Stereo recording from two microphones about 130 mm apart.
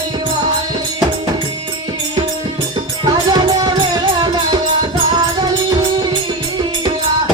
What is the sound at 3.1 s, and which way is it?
Music, 35° right (ahead or behind).